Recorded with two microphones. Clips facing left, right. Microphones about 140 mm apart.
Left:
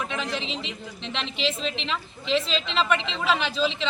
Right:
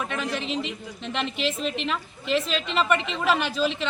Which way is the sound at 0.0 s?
5° right (ahead or behind).